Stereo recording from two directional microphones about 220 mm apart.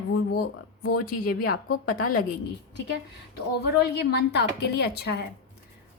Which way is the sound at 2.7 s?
50° left (ahead or behind).